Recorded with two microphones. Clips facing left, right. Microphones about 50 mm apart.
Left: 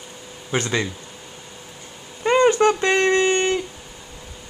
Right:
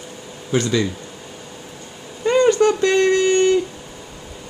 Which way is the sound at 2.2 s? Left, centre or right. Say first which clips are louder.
Right 1 dB; left.